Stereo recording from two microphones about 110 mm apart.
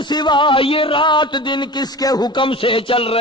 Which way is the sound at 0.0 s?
45° left (ahead or behind).